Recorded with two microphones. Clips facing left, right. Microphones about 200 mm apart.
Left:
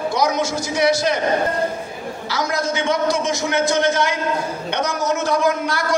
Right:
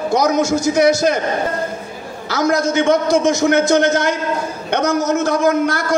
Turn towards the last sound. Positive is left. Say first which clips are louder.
# right 4 dB
turn(degrees=-50)  # may be behind; listen again after turning